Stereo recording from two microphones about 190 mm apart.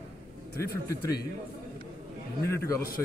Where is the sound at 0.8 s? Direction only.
15° left (ahead or behind).